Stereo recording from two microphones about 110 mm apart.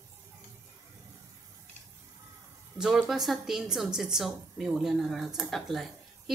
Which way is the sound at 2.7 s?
25° right (ahead or behind).